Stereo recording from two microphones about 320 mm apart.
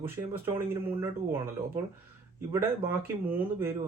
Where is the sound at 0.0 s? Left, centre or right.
Centre.